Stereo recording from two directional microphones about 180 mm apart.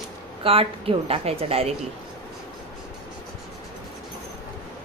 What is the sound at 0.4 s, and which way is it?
Speech, 30° right (ahead or behind).